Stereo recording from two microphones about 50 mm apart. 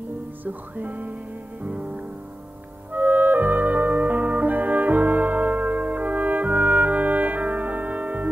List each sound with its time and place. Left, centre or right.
0.5 s music: right
2.9 s music: right